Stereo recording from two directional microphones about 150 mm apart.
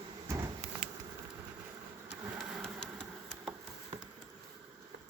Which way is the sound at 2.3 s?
Centre (ahead or behind).